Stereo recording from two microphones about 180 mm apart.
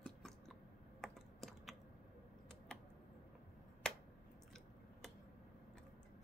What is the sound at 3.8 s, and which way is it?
Finger snapping, 5° left (ahead or behind).